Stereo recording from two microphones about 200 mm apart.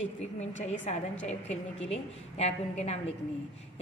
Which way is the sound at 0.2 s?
35° left (ahead or behind).